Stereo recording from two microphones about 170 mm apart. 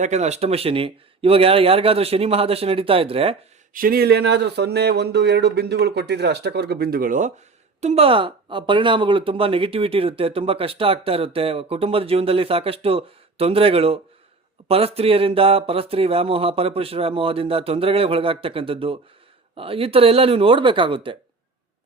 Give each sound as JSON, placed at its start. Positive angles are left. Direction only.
{"t": 0.0, "sound": "speech", "side_deg": -40}
{"t": 3.7, "sound": "speech", "side_deg": -60}
{"t": 7.8, "sound": "speech", "side_deg": -40}